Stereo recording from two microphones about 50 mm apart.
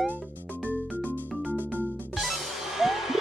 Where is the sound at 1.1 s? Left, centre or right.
Right.